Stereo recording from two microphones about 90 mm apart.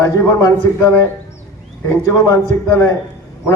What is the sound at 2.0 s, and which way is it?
Speech, 30° left (ahead or behind).